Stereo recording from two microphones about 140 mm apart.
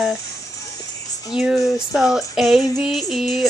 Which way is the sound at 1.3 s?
5° right (ahead or behind).